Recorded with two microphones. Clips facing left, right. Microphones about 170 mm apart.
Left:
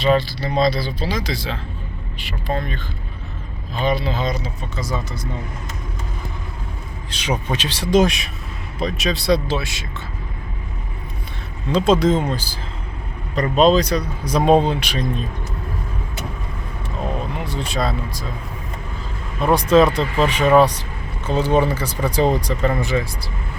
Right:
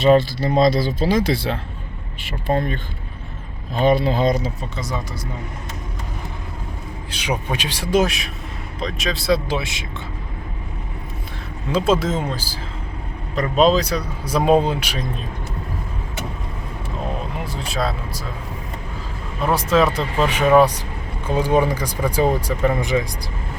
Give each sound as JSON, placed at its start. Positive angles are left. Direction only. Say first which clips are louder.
{"t": 0.0, "sound": "speech", "louder": "right 3 dB", "side_deg": -50}
{"t": 3.8, "sound": "speech", "louder": "right 4 dB", "side_deg": -50}
{"t": 4.8, "sound": "speech", "louder": "left 2 dB", "side_deg": -20}
{"t": 7.1, "sound": "speech", "louder": "left 1 dB", "side_deg": -10}
{"t": 9.5, "sound": "speech", "louder": "even", "side_deg": -20}
{"t": 11.7, "sound": "speech", "louder": "left 3 dB", "side_deg": -5}
{"t": 17.4, "sound": "speech", "louder": "even", "side_deg": -5}
{"t": 19.5, "sound": "speech", "louder": "left 4 dB", "side_deg": -5}